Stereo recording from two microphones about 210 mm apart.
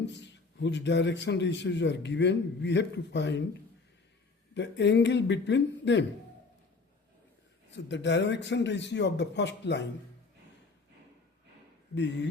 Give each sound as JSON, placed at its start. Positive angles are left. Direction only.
{"t": 0.0, "sound": "a man's voice", "side_deg": 55}
{"t": 4.5, "sound": "a man's voice", "side_deg": 55}
{"t": 7.7, "sound": "a man's voice", "side_deg": 55}
{"t": 11.9, "sound": "a man's voice", "side_deg": 55}